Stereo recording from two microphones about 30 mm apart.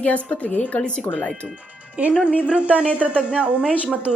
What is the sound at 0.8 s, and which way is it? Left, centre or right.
Speech, left.